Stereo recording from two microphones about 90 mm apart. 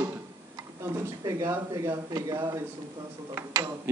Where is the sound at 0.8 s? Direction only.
35° right (ahead or behind).